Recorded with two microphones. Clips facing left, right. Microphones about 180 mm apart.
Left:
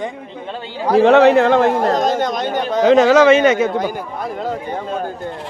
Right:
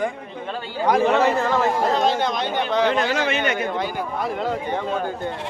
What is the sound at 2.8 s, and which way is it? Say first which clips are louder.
Speech: left 11 dB; 90° left.